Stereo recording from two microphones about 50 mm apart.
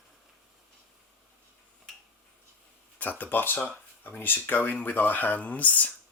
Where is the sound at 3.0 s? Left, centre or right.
Left.